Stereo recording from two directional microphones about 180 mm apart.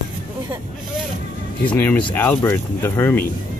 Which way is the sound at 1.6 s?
10° left (ahead or behind).